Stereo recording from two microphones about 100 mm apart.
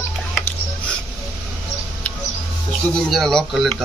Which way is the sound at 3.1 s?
Centre (ahead or behind).